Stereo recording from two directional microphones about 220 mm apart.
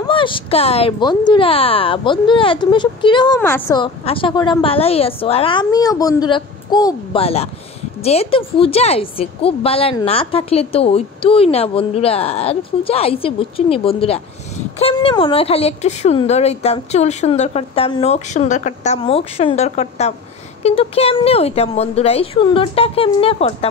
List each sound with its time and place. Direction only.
0.1 s a woman's voice: 25° left (ahead or behind)
3.3 s a woman's voice: 10° left (ahead or behind); by 23.7 s 25° left (ahead or behind)